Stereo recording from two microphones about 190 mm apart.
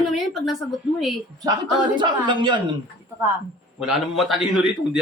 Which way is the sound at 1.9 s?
25° right (ahead or behind).